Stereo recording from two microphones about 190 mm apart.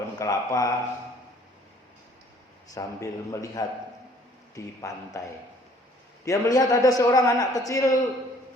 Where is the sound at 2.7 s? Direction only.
15° left (ahead or behind).